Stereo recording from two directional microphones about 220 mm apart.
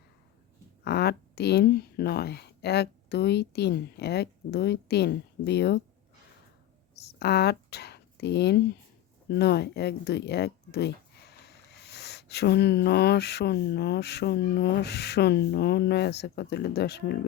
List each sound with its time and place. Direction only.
0.9 s speech: 50° left (ahead or behind)
7.2 s speech: 50° left (ahead or behind)